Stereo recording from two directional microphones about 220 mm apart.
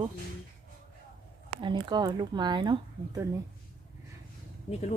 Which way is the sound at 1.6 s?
20° right (ahead or behind).